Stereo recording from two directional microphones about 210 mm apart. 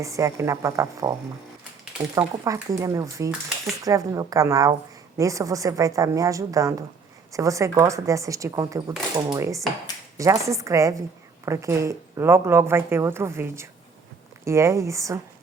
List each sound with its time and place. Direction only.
0.0 s speech: 15° right (ahead or behind)
2.1 s speech: 15° right (ahead or behind)